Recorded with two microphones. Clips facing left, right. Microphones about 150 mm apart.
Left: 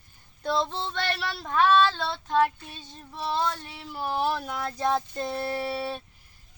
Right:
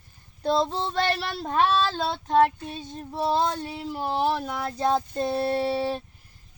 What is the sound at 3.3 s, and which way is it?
Speech, 35° right (ahead or behind).